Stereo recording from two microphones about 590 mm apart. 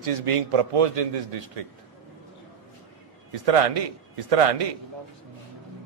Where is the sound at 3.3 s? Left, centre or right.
Right.